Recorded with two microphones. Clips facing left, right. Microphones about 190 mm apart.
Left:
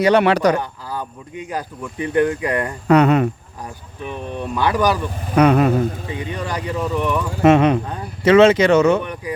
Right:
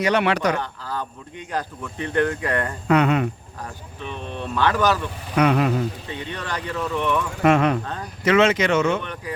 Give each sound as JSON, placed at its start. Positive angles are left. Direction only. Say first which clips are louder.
{"t": 0.0, "sound": "speech", "louder": "left 6 dB", "side_deg": 35}
{"t": 0.6, "sound": "speech", "louder": "left 2 dB", "side_deg": 10}
{"t": 2.8, "sound": "speech", "louder": "left 5 dB", "side_deg": 40}
{"t": 3.6, "sound": "speech", "louder": "left 3 dB", "side_deg": 10}
{"t": 5.3, "sound": "speech", "louder": "left 5 dB", "side_deg": 45}
{"t": 6.1, "sound": "speech", "louder": "left 4 dB", "side_deg": 10}
{"t": 7.3, "sound": "speech", "louder": "left 6 dB", "side_deg": 20}
{"t": 8.2, "sound": "speech", "louder": "left 7 dB", "side_deg": 30}
{"t": 9.0, "sound": "speech", "louder": "left 5 dB", "side_deg": 10}